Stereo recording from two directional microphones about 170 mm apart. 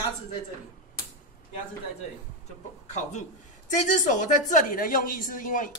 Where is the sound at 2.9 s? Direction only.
45° left (ahead or behind).